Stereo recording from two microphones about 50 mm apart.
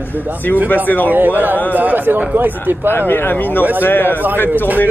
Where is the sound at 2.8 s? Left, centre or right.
Left.